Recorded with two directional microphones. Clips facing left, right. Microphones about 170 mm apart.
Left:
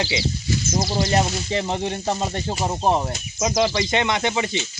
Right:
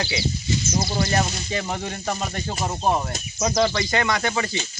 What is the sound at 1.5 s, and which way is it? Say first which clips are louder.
Speech: left 4 dB; 25° left (ahead or behind).